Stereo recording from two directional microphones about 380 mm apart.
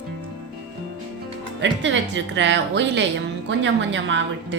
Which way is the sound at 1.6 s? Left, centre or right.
Right.